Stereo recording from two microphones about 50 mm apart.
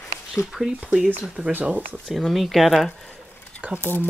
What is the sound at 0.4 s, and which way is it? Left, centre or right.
Speech, left.